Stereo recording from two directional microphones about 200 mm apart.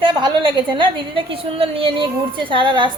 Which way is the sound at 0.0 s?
25° right (ahead or behind).